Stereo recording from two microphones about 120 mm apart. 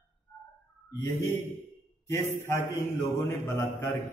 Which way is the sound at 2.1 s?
20° left (ahead or behind).